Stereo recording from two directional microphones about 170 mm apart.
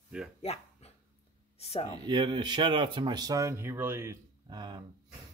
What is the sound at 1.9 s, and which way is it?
Speech, 25° right (ahead or behind).